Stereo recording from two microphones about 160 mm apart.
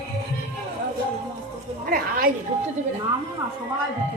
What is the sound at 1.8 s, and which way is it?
Speech, 65° right (ahead or behind).